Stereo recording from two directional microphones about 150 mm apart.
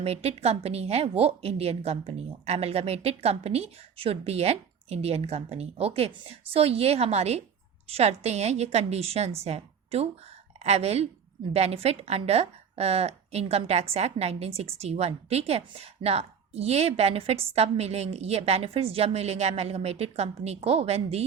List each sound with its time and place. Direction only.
0.0 s a woman's voice: 45° right (ahead or behind)